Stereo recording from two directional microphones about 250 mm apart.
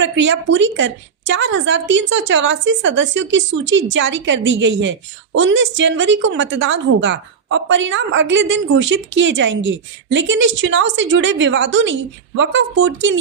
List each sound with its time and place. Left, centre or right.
0.0 s a woman's voice: right